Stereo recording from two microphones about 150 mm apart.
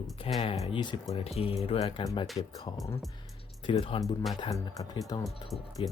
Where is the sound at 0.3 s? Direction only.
45° left (ahead or behind).